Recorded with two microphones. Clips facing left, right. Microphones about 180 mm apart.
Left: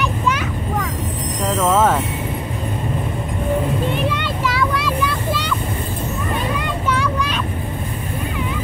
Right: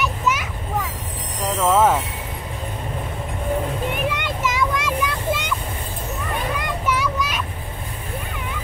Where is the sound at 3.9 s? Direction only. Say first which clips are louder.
Left 3 dB; 15° right (ahead or behind).